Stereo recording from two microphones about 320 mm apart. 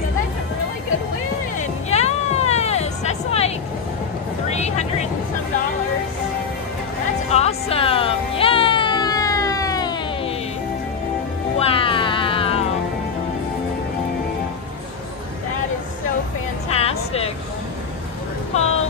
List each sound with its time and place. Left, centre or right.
1.6 s music: centre
4.5 s vehicle: left
7.2 s music: centre
11.6 s music: centre
16.6 s music: centre
18.5 s a sound: left